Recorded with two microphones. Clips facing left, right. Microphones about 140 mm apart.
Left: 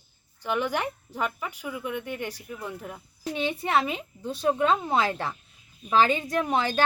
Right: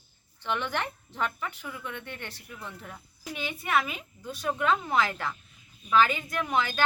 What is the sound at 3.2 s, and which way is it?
A woman's voice, 30° left (ahead or behind).